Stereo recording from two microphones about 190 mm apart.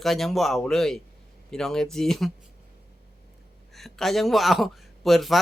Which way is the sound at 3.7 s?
Centre (ahead or behind).